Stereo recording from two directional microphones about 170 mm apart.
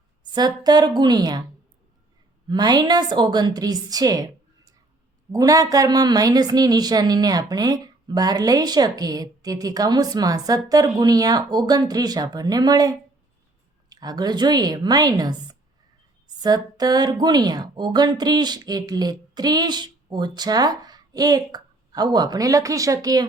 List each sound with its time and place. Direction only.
0.3 s speech: 25° right (ahead or behind)
2.5 s speech: 25° right (ahead or behind)
5.3 s speech: 20° right (ahead or behind)
16.4 s speech: 25° right (ahead or behind)